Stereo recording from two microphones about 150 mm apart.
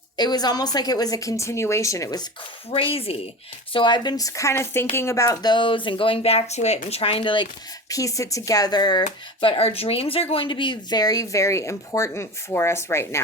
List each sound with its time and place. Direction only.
0.2 s speech: 25° left (ahead or behind)
2.6 s speech: 40° left (ahead or behind)
7.9 s speech: 20° left (ahead or behind)
9.4 s speech: 40° left (ahead or behind); by 13.1 s 15° left (ahead or behind)